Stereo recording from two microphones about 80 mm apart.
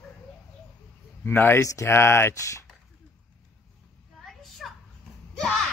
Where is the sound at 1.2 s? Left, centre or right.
Left.